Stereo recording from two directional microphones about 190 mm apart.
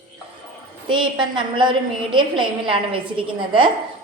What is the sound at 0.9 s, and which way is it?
A woman's voice, 25° right (ahead or behind).